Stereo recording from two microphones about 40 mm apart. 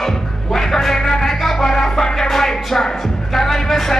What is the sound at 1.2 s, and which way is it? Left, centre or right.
Music, centre.